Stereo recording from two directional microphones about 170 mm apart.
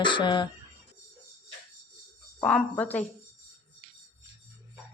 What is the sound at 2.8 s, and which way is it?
Speech, 10° left (ahead or behind).